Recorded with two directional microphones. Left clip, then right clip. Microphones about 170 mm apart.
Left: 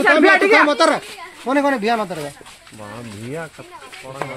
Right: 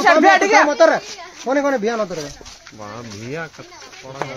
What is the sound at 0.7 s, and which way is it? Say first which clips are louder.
Speech: right 2 dB; 90° left.